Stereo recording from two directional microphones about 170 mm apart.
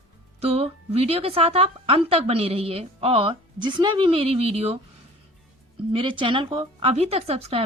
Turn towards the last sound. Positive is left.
turn(degrees=-35)  # may be behind; listen again after turning